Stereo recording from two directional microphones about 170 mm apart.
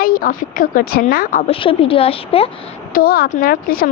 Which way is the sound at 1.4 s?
35° left (ahead or behind).